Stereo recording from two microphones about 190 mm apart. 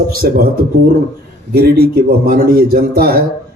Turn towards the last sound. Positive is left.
turn(degrees=-50)  # may be behind; listen again after turning